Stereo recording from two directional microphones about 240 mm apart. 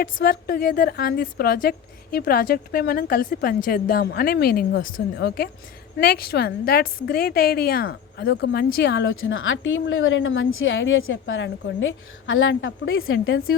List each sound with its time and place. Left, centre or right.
0.0 s a woman's voice: left